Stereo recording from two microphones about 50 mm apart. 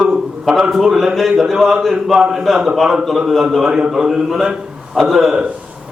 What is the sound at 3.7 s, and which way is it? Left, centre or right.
A man's voice, centre.